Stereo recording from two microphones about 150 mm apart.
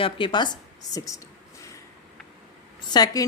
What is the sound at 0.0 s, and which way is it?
A woman's voice, 35° left (ahead or behind).